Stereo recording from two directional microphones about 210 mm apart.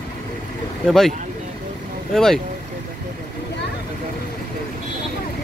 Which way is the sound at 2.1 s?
Centre (ahead or behind).